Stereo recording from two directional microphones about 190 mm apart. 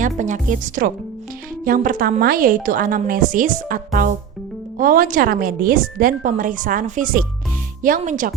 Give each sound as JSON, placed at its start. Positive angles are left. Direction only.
{"t": 0.2, "sound": "a woman's voice", "side_deg": -40}